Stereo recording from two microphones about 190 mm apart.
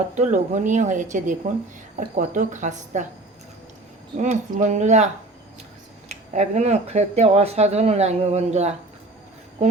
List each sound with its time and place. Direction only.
0.2 s speech: 40° right (ahead or behind)
4.2 s speech: 40° right (ahead or behind)
6.1 s speech: 40° right (ahead or behind)